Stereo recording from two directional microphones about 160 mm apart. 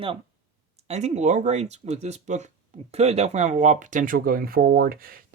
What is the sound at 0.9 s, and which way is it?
Speech, 45° right (ahead or behind).